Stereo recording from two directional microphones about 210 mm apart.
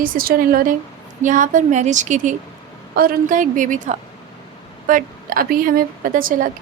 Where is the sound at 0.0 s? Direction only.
45° right (ahead or behind).